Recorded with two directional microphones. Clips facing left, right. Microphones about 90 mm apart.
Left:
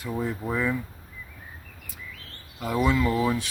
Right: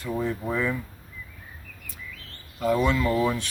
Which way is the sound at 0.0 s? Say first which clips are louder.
Right 1 dB; 5° left (ahead or behind).